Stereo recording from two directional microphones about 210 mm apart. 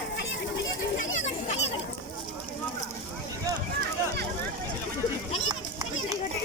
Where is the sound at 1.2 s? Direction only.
35° left (ahead or behind).